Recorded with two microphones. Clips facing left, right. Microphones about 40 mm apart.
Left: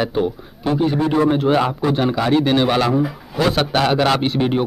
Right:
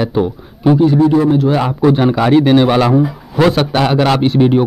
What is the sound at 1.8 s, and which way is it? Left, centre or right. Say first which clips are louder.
A man's voice: right 7 dB; centre.